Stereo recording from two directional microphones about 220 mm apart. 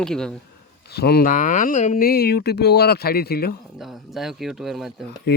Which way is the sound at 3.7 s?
Centre (ahead or behind).